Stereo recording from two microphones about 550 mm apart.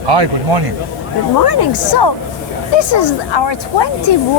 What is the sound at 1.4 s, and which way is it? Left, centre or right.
Speech, left.